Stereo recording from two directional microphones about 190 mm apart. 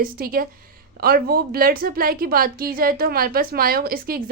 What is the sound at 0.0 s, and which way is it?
A woman's voice, 50° right (ahead or behind).